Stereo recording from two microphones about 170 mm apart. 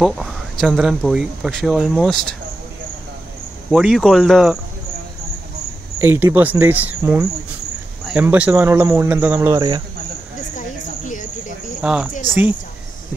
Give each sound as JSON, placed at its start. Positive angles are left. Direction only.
{"t": 0.0, "sound": "speech", "side_deg": 0}
{"t": 3.7, "sound": "speech", "side_deg": 0}
{"t": 5.9, "sound": "speech", "side_deg": -15}
{"t": 11.1, "sound": "cricket", "side_deg": 50}
{"t": 11.8, "sound": "speech", "side_deg": -5}